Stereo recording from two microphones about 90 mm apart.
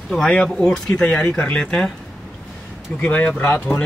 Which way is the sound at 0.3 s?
10° left (ahead or behind).